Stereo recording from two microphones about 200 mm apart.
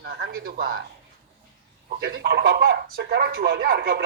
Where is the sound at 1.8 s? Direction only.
55° right (ahead or behind).